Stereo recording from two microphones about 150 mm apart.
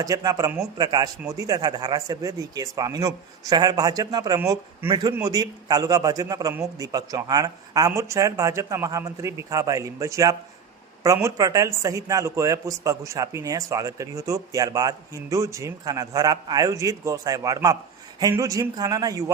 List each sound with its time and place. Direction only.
0.0 s speech: 25° right (ahead or behind)
4.4 s a man's voice: 15° right (ahead or behind)